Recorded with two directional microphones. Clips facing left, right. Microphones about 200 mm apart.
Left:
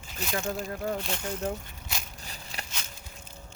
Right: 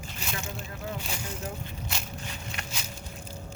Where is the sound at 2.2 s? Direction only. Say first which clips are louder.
Right 3 dB; 35° left (ahead or behind).